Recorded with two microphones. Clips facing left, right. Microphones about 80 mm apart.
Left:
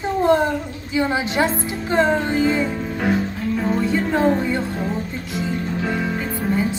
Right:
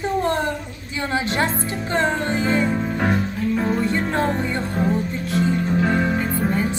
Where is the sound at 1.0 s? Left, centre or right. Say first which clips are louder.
Left 3 dB; centre.